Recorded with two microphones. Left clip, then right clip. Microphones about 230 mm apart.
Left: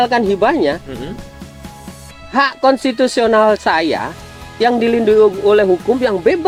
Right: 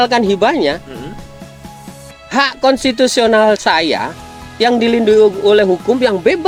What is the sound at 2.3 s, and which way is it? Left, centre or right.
Speech, right.